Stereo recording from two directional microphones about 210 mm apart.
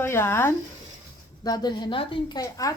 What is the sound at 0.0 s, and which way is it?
A woman's voice, 10° left (ahead or behind).